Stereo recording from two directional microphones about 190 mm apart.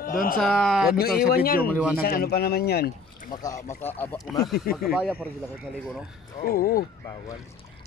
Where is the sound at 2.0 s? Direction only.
55° left (ahead or behind).